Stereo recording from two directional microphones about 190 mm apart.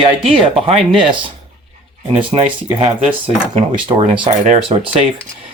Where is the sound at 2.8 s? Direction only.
30° right (ahead or behind).